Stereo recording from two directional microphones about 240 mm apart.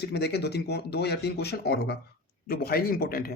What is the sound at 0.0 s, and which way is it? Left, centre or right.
Speech, left.